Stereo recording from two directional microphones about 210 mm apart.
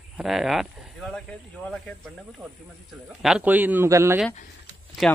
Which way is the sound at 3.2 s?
5° right (ahead or behind).